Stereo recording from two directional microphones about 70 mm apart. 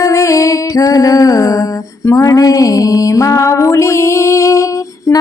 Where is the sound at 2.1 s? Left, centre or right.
Left.